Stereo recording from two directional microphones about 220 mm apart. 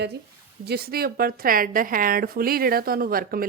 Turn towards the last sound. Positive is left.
turn(degrees=-40)  # may be behind; listen again after turning